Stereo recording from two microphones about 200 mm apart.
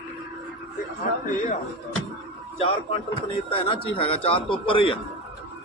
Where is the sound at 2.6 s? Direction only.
25° left (ahead or behind).